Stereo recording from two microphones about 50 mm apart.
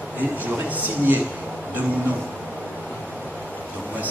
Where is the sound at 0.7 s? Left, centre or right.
Right.